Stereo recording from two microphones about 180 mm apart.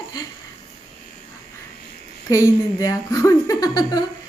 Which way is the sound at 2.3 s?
20° left (ahead or behind).